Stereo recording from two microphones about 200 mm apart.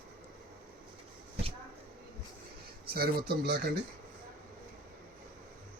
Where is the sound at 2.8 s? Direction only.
50° right (ahead or behind).